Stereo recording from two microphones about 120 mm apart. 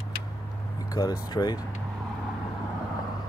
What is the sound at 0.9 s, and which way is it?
Speech, 35° left (ahead or behind).